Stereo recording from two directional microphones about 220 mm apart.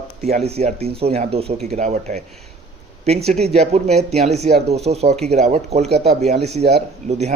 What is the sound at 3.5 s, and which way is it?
Speech, 30° right (ahead or behind).